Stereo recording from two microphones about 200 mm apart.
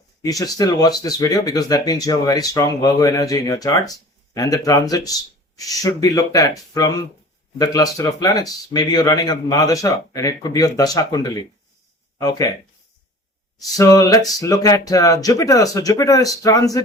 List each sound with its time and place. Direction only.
0.2 s speech: 15° left (ahead or behind)
13.7 s speech: 15° left (ahead or behind)